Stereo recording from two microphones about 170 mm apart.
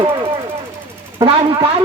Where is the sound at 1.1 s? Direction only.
35° right (ahead or behind).